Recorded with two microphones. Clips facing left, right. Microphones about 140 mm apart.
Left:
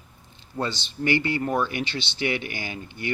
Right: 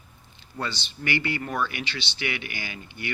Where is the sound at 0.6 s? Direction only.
40° left (ahead or behind).